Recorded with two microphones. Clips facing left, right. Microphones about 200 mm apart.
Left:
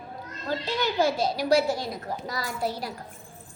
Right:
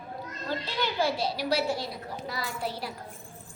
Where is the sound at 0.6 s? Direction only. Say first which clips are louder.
Left 4 dB; 45° left (ahead or behind).